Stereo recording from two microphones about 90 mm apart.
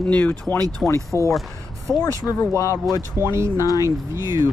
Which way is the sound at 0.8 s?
30° left (ahead or behind).